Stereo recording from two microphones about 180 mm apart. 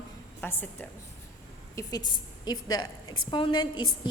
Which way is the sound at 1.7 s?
20° left (ahead or behind).